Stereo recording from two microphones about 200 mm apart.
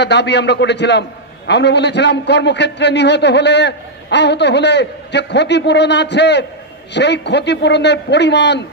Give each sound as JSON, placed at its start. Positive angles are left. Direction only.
{"t": 0.0, "sound": "a man's voice", "side_deg": 60}